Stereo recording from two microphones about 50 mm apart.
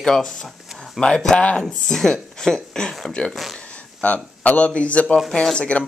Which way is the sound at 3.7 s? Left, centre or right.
Left.